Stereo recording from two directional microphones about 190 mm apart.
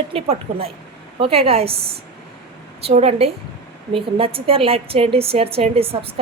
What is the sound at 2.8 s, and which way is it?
A woman's voice, 35° right (ahead or behind).